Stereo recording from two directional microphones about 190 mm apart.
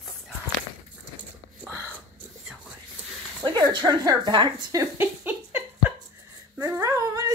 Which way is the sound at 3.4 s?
20° right (ahead or behind).